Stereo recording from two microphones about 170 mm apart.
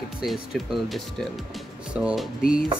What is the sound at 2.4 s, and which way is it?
Speech, 55° left (ahead or behind).